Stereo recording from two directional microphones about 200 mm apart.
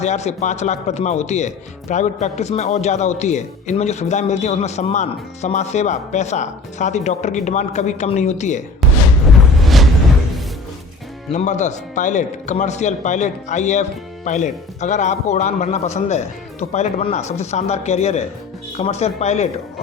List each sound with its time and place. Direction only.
0.0 s speech: 35° left (ahead or behind)
8.8 s music: centre (ahead or behind)
11.3 s speech: 35° left (ahead or behind)